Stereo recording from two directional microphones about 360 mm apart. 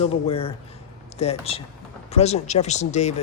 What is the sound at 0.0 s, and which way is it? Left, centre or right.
Speech, centre.